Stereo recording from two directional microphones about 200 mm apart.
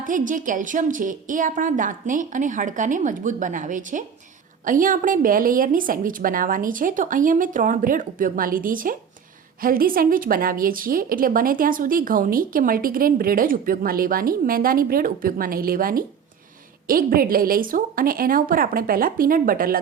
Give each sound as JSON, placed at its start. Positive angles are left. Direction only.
{"t": 0.0, "sound": "a woman's voice", "side_deg": -40}